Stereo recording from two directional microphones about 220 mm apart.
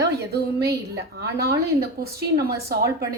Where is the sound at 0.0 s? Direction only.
45° right (ahead or behind).